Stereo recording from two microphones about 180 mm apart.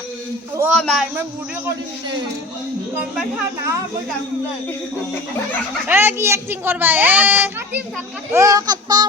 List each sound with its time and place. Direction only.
0.7 s speech: centre (ahead or behind)
3.0 s speech: 5° right (ahead or behind)
5.9 s a woman's voice: 10° right (ahead or behind)
8.3 s child singing: 20° right (ahead or behind)